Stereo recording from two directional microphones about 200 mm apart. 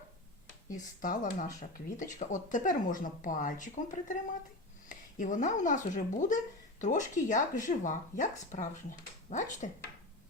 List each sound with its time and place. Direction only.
0.7 s speech: 45° left (ahead or behind)